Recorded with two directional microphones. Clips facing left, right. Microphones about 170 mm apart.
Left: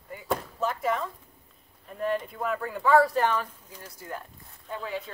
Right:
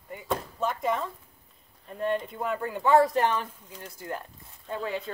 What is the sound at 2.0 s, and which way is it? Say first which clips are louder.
Speech: even; 25° right (ahead or behind).